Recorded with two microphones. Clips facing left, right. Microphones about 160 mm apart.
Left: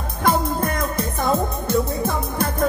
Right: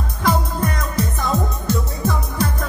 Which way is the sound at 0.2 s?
55° left (ahead or behind).